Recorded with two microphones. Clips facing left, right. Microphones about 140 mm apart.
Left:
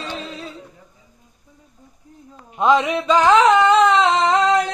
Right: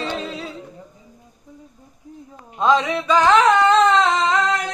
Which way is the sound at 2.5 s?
20° left (ahead or behind).